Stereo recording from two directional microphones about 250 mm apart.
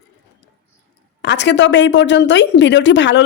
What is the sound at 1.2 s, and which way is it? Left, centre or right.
Speech, left.